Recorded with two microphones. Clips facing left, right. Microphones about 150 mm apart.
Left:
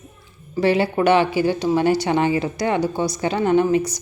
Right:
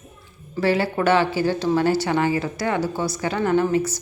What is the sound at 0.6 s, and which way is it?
A woman's voice, 20° left (ahead or behind).